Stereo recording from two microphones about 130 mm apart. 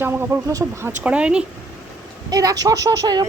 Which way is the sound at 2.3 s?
30° right (ahead or behind).